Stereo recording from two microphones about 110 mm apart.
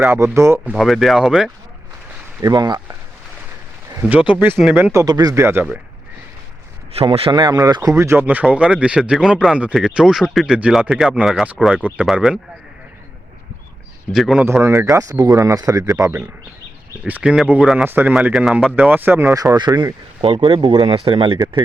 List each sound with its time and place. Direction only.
0.0 s speech: 25° right (ahead or behind)
0.7 s speech: centre (ahead or behind)
2.4 s speech: 40° right (ahead or behind)
4.1 s speech: 10° right (ahead or behind)
4.8 s speech: 30° right (ahead or behind)
5.3 s speech: 20° right (ahead or behind)
6.9 s speech: 60° right (ahead or behind)
7.3 s speech: 35° right (ahead or behind); by 12.4 s 5° right (ahead or behind)
14.1 s speech: centre (ahead or behind)
14.4 s speech: 25° right (ahead or behind)
17.1 s speech: 15° right (ahead or behind)
17.8 s speech: 20° right (ahead or behind)
18.9 s speech: 15° right (ahead or behind); by 21.3 s 50° right (ahead or behind)